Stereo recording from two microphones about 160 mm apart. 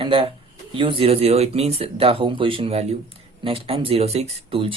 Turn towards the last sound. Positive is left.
turn(degrees=-35)  # may be behind; listen again after turning